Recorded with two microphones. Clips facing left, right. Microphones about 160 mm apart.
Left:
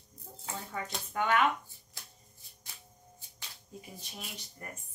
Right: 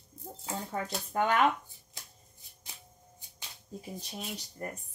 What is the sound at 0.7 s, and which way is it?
Speech, 40° right (ahead or behind).